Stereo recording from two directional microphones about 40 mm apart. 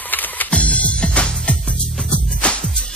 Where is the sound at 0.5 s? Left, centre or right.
Left.